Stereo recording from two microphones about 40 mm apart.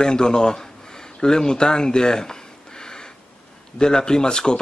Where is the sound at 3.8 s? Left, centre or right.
Centre.